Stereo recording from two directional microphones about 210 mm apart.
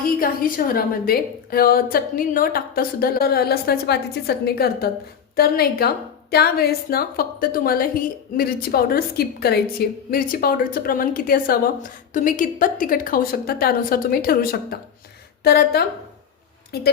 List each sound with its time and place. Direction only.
0.2 s a woman's voice: 45° left (ahead or behind)